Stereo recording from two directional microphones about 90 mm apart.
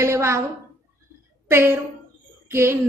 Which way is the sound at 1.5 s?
25° right (ahead or behind).